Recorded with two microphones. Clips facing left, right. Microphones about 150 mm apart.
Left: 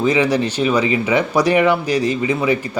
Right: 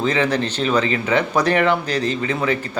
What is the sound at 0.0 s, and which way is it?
Speech, 10° left (ahead or behind).